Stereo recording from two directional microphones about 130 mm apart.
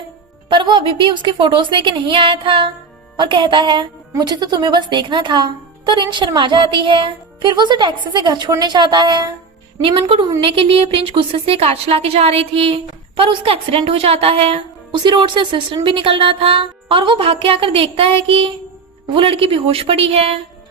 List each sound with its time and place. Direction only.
0.5 s a woman's voice: 40° right (ahead or behind)